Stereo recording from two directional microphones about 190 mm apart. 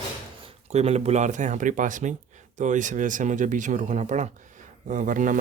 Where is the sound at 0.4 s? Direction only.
35° right (ahead or behind).